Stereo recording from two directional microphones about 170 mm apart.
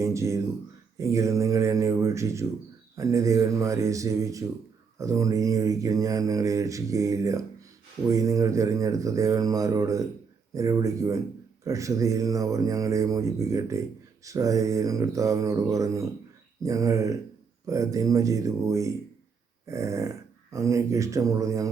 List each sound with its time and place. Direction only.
0.0 s speech: 15° right (ahead or behind)
2.9 s mantra: 20° right (ahead or behind)
19.6 s speech: 15° right (ahead or behind)